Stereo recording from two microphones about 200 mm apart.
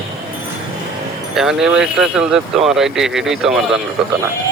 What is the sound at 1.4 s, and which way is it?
Speech, centre (ahead or behind).